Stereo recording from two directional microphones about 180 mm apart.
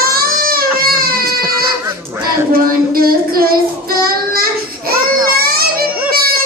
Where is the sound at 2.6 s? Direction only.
55° right (ahead or behind).